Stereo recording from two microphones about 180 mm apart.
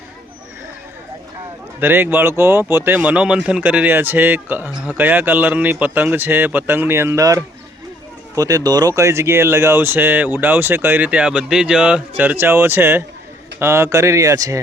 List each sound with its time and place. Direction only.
1.8 s speech: 10° right (ahead or behind)